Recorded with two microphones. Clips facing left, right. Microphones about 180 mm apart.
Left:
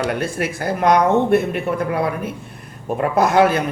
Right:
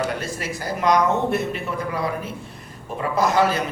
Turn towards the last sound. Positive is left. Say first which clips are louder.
# left 4 dB
turn(degrees=55)  # may be behind; listen again after turning